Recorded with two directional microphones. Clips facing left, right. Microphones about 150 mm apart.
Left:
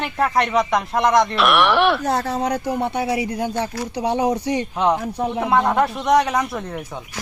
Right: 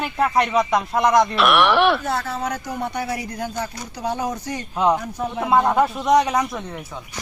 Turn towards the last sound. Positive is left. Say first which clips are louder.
# even
turn(degrees=0)  # may be behind; listen again after turning